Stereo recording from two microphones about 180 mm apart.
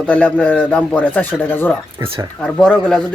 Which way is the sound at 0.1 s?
10° left (ahead or behind).